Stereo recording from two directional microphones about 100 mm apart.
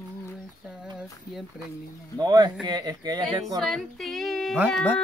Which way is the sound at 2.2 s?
45° right (ahead or behind).